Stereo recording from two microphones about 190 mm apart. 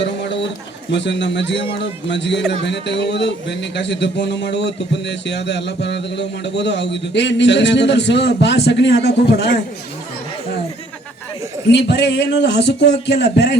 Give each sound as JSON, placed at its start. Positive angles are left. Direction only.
{"t": 0.9, "sound": "a man's voice", "side_deg": 70}
{"t": 11.7, "sound": "speech", "side_deg": 65}